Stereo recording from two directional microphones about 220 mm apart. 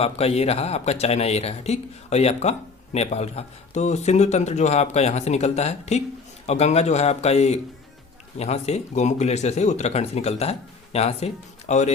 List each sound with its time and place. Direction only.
0.0 s speech: 30° left (ahead or behind)